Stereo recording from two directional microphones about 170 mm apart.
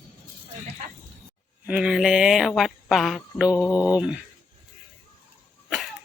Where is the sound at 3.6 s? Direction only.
15° left (ahead or behind).